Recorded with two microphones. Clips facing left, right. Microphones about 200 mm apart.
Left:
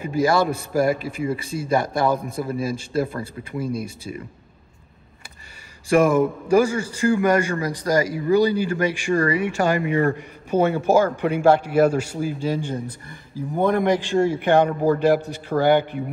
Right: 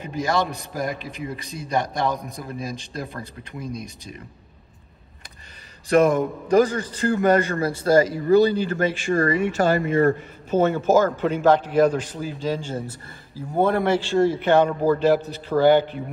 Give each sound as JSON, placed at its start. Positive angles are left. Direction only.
{"t": 0.0, "sound": "a man's voice", "side_deg": 5}
{"t": 5.9, "sound": "speech", "side_deg": 10}
{"t": 10.7, "sound": "speech", "side_deg": 10}